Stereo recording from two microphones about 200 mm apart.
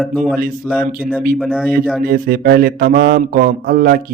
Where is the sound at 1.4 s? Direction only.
5° right (ahead or behind).